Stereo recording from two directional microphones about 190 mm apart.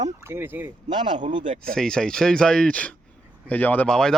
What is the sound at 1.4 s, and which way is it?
Speech, 40° right (ahead or behind).